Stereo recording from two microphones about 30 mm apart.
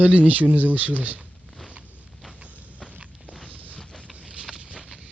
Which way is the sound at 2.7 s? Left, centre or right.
Left.